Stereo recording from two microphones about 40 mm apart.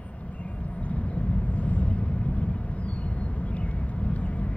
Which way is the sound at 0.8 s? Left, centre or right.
Left.